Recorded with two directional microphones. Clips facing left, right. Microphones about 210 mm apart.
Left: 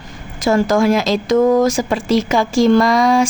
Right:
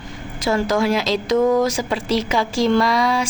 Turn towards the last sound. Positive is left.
turn(degrees=45)  # may be behind; listen again after turning